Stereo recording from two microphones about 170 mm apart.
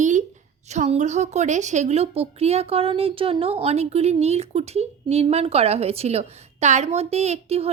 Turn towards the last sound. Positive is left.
turn(degrees=-35)  # may be behind; listen again after turning